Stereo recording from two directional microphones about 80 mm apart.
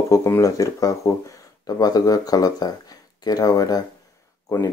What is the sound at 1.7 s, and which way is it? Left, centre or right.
Speech, left.